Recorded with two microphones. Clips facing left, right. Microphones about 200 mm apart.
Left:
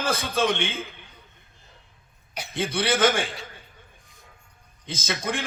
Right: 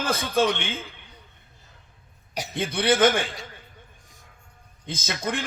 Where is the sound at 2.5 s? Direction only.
55° right (ahead or behind).